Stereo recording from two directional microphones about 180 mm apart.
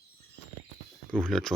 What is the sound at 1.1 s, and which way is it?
Speech, 5° left (ahead or behind).